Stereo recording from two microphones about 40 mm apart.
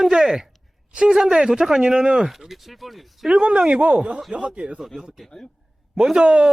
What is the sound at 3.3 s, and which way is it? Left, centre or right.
Speech, right.